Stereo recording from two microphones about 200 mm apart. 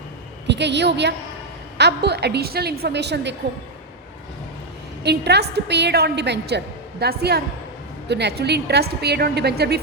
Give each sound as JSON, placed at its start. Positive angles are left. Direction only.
{"t": 0.4, "sound": "a woman's voice", "side_deg": -60}
{"t": 5.0, "sound": "a woman's voice", "side_deg": -55}